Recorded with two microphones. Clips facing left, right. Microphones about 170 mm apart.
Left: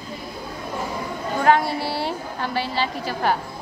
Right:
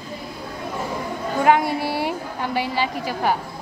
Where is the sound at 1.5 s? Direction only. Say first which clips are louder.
Even; 15° right (ahead or behind).